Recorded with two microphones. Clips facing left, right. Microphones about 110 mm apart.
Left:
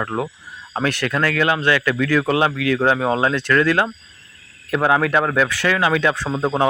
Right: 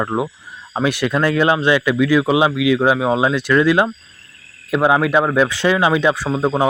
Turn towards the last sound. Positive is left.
turn(degrees=-5)  # may be behind; listen again after turning